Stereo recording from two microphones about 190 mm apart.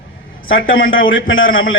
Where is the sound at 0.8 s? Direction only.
90° left.